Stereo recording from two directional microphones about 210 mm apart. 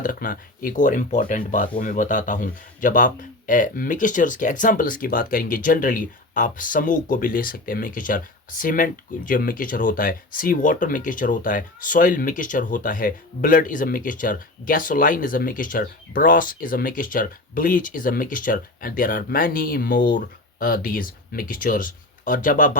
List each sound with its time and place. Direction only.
0.0 s speech: 40° left (ahead or behind)